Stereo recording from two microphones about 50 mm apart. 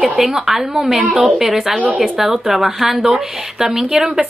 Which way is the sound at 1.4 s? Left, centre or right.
Centre.